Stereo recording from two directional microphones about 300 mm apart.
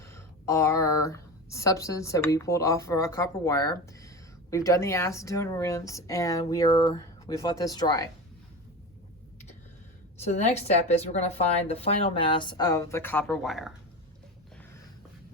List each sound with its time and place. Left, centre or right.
0.0 s a woman's voice: centre
10.2 s a woman's voice: left; by 13.7 s centre